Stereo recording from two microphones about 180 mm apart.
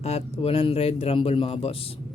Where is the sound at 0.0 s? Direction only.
35° left (ahead or behind).